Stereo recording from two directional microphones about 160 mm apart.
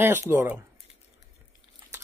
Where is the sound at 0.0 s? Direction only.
15° right (ahead or behind).